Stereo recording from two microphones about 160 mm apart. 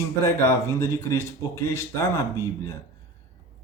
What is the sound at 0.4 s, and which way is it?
A man's voice, 20° left (ahead or behind).